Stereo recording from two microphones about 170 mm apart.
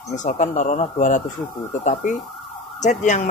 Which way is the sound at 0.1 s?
45° left (ahead or behind).